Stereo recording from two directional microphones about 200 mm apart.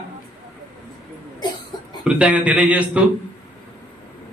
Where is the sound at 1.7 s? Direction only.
20° left (ahead or behind).